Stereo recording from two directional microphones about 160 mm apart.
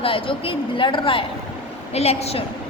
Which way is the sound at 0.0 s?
35° left (ahead or behind).